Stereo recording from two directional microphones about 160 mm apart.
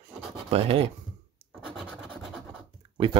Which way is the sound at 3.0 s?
30° right (ahead or behind).